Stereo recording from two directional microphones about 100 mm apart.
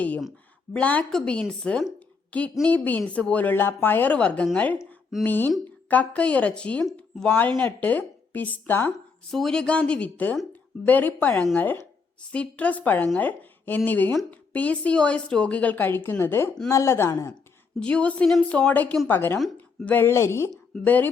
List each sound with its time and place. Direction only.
0.7 s a woman's voice: 15° left (ahead or behind)
9.3 s a woman's voice: 5° left (ahead or behind); by 17.3 s 30° left (ahead or behind)
17.7 s a woman's voice: 10° left (ahead or behind); by 20.5 s 25° left (ahead or behind)
20.7 s a woman's voice: 15° left (ahead or behind)